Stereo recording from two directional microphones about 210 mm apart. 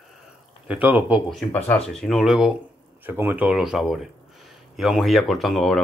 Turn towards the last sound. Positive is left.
turn(degrees=0)  # may be behind; listen again after turning